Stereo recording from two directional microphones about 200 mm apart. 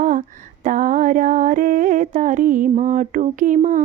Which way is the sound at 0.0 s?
40° right (ahead or behind).